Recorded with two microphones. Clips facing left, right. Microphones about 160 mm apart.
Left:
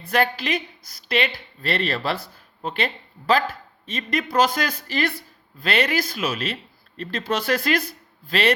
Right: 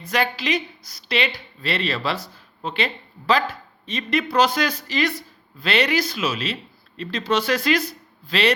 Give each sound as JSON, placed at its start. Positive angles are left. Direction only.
{"t": 0.1, "sound": "speech", "side_deg": 50}